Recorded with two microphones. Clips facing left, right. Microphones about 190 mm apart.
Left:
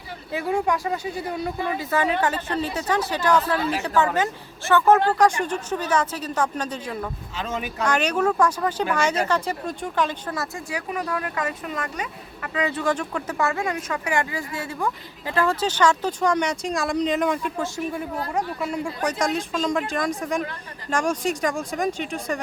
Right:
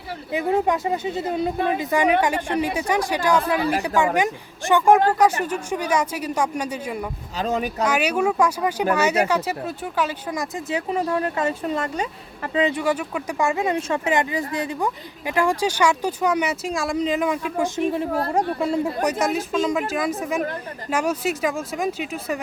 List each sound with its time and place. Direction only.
0.3 s speech: 20° right (ahead or behind)
7.3 s a woman's voice: 40° right (ahead or behind)
7.9 s speech: 10° right (ahead or behind)
10.7 s speech: 25° right (ahead or behind)
12.7 s speech: 10° right (ahead or behind)
17.6 s a woman's voice: 25° right (ahead or behind)
19.2 s speech: 5° right (ahead or behind)